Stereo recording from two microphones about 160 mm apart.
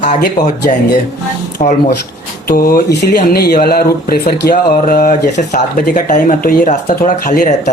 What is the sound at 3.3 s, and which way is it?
Speech, 75° left (ahead or behind).